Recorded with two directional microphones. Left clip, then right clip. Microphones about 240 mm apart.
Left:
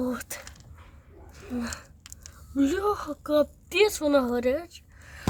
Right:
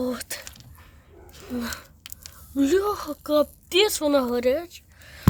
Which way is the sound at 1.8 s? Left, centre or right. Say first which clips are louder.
Right 5 dB; centre.